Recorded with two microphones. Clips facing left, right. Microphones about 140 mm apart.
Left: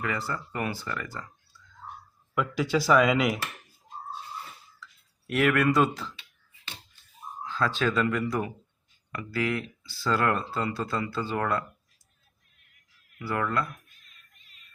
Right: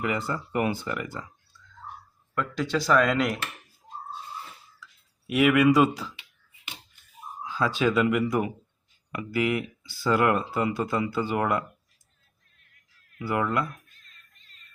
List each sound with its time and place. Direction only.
0.0 s speech: 20° right (ahead or behind)
2.3 s speech: 10° left (ahead or behind)
5.3 s speech: 5° right (ahead or behind)
7.4 s speech: 10° right (ahead or behind)
13.1 s speech: 15° right (ahead or behind)